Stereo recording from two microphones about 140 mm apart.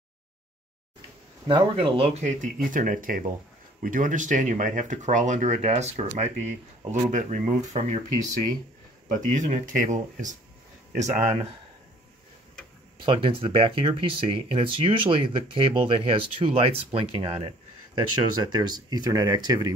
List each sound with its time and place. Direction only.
1.5 s speech: 35° right (ahead or behind); by 8.0 s 55° right (ahead or behind)
9.3 s speech: 65° right (ahead or behind)
13.0 s speech: 40° right (ahead or behind)
17.9 s speech: 30° right (ahead or behind)